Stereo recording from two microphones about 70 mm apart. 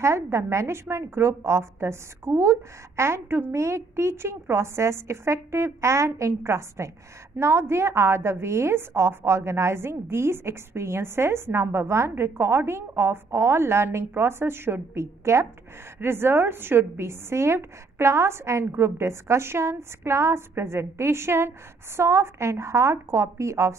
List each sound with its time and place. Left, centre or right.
0.0 s a woman's voice: right